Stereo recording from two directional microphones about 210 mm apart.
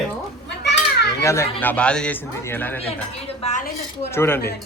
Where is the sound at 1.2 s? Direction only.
15° left (ahead or behind).